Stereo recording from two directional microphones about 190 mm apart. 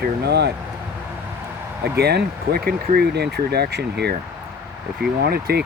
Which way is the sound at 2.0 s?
60° right (ahead or behind).